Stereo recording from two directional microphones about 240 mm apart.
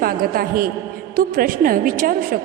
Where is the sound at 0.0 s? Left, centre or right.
Right.